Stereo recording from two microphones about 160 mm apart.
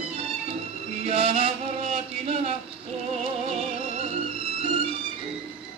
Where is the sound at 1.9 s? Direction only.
45° right (ahead or behind).